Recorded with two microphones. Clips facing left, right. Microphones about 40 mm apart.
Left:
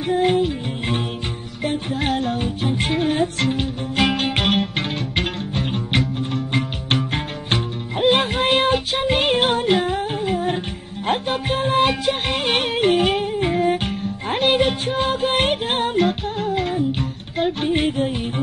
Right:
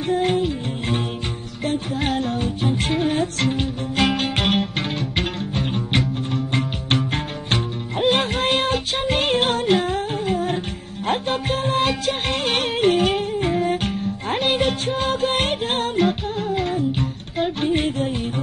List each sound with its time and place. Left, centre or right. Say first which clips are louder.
0.0 s music: left 2 dB; centre